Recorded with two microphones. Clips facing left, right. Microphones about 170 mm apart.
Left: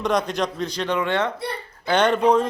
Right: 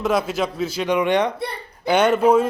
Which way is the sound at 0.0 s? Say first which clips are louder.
Right 1 dB; 5° right (ahead or behind).